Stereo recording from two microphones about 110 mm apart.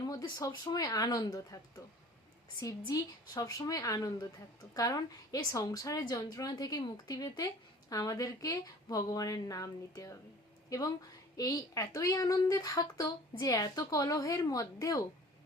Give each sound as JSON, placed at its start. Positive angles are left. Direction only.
{"t": 0.0, "sound": "a woman's voice", "side_deg": 35}